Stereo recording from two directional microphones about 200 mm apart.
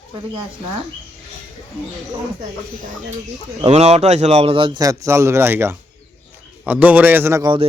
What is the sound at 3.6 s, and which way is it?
A man's voice, 30° right (ahead or behind).